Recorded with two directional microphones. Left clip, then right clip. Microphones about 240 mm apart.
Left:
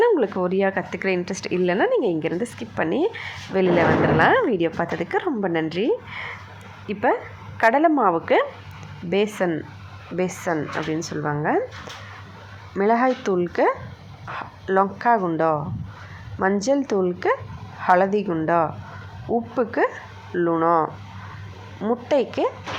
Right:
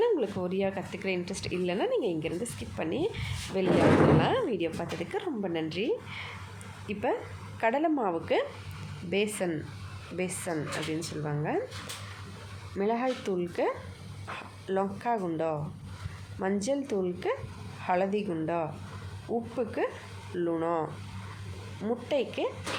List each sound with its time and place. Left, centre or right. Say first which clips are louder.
0.0 s speech: left 9 dB; centre
12.7 s speech: left 10 dB; centre
21.8 s speech: left 9 dB; centre